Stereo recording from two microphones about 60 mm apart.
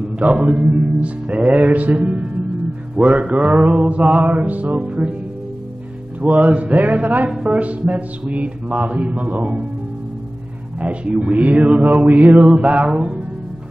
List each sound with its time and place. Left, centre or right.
0.2 s music: right
4.7 s music: centre
6.2 s music: right
10.8 s music: right
12.4 s music: right